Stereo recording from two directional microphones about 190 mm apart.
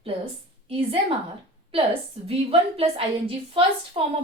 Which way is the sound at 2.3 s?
30° right (ahead or behind).